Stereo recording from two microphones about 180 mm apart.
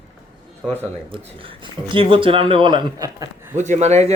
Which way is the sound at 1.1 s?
30° right (ahead or behind).